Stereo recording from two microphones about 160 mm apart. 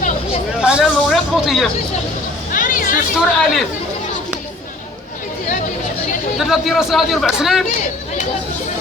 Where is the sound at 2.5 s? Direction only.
60° left (ahead or behind).